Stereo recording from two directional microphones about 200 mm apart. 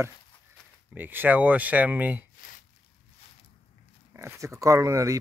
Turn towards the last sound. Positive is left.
turn(degrees=-15)  # may be behind; listen again after turning